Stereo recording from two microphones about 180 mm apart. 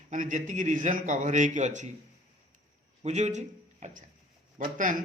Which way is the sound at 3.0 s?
40° right (ahead or behind).